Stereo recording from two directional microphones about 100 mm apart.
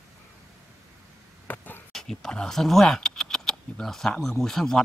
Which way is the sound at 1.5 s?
20° left (ahead or behind).